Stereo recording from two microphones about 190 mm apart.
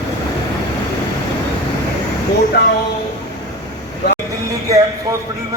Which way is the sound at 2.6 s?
60° left (ahead or behind).